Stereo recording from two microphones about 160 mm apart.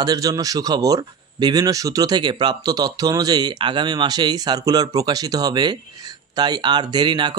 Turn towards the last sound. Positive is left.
turn(degrees=-30)  # may be behind; listen again after turning